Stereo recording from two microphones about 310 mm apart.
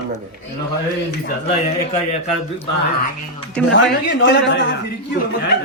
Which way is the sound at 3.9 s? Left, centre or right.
Left.